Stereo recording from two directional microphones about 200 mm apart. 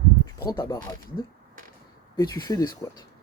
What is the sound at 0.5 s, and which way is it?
Speech, 20° left (ahead or behind).